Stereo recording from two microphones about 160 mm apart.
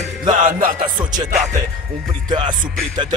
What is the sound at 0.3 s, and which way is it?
Music, 50° right (ahead or behind).